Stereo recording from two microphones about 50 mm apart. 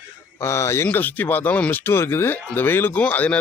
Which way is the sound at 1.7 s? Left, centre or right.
Left.